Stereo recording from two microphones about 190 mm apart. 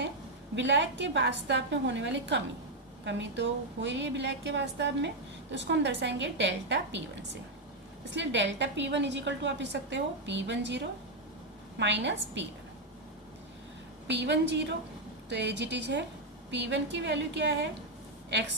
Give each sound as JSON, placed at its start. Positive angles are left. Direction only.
{"t": 0.5, "sound": "a woman's voice", "side_deg": -70}
{"t": 14.1, "sound": "a woman's voice", "side_deg": -65}